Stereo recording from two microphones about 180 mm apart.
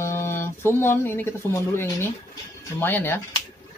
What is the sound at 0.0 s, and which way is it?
Speech, 15° left (ahead or behind).